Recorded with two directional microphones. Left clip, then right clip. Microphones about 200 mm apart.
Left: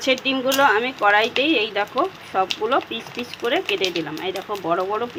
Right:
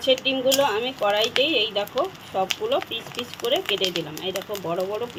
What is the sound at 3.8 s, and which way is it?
Speech, 20° right (ahead or behind).